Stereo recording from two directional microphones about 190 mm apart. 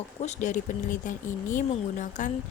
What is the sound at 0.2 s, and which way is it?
A woman's voice, 40° left (ahead or behind).